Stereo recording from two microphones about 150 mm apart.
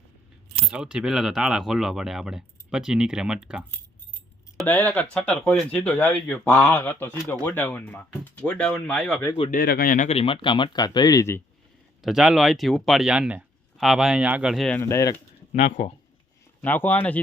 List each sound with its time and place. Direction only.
0.6 s speech: 5° right (ahead or behind)
4.5 s speech: 10° left (ahead or behind)
9.5 s speech: 80° left
10.1 s speech: 40° left (ahead or behind); by 11.4 s 20° left (ahead or behind)
12.0 s speech: 5° right (ahead or behind)
14.8 s speech: 20° left (ahead or behind)
15.5 s speech: 50° left (ahead or behind)
16.6 s speech: 10° left (ahead or behind)